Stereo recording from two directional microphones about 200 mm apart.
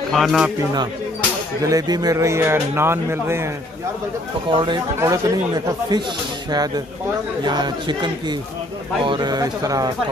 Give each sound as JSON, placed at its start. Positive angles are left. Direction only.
{"t": 0.1, "sound": "speech", "side_deg": 0}
{"t": 1.6, "sound": "a man's voice", "side_deg": -15}
{"t": 4.5, "sound": "speech", "side_deg": -20}